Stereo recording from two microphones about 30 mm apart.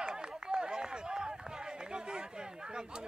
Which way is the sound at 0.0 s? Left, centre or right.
Right.